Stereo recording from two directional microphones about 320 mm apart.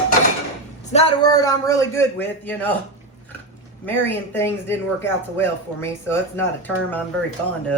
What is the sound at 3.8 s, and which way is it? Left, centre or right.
Speech, centre.